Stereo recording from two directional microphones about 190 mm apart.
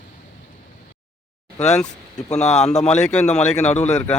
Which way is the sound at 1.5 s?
35° left (ahead or behind).